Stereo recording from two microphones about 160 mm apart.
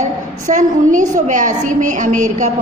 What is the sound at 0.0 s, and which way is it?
A woman's voice, 50° right (ahead or behind).